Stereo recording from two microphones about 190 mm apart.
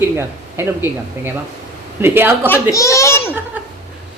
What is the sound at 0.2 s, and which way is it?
Speech, 15° right (ahead or behind).